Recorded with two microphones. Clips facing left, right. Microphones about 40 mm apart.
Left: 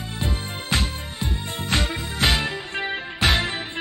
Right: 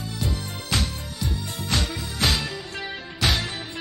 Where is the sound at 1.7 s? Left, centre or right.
Left.